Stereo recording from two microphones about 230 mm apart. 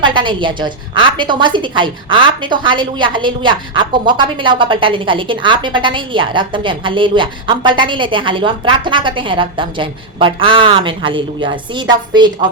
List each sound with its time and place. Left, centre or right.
0.0 s a woman's voice: right